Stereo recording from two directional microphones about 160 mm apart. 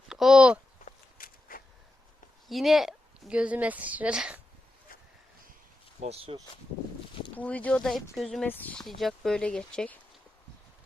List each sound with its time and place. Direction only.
0.1 s speech: 5° right (ahead or behind)
0.9 s walk: 60° left (ahead or behind)
2.5 s a woman's voice: centre (ahead or behind)
4.9 s a sound: 65° left (ahead or behind)
6.0 s speech: 40° right (ahead or behind)
7.3 s speech: 10° left (ahead or behind)